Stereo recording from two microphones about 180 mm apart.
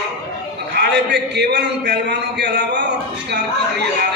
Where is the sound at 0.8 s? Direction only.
70° right (ahead or behind).